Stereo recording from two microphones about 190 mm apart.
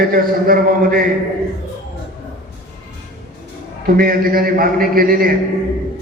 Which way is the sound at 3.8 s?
50° right (ahead or behind).